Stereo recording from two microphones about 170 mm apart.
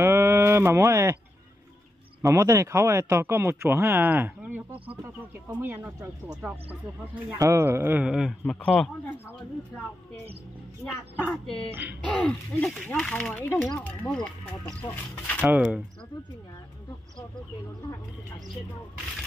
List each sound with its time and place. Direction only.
0.0 s a sound: 15° right (ahead or behind)
2.2 s speech: 20° right (ahead or behind); by 8.9 s centre (ahead or behind)
11.1 s speech: centre (ahead or behind)
11.7 s speech: 10° right (ahead or behind)
12.0 s speech: 5° left (ahead or behind)
15.4 s speech: 5° right (ahead or behind)